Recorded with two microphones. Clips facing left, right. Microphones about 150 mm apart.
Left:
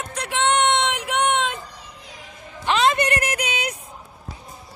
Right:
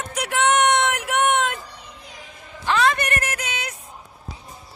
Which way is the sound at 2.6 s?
20° left (ahead or behind).